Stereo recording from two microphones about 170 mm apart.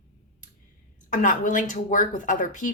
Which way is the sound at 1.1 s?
50° left (ahead or behind).